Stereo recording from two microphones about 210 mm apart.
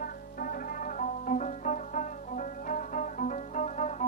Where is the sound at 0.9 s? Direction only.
35° left (ahead or behind).